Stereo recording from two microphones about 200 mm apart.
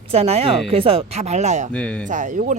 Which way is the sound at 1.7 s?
5° left (ahead or behind).